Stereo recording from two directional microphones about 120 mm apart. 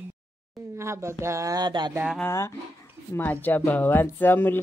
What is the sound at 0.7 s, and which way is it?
Speech, 20° right (ahead or behind).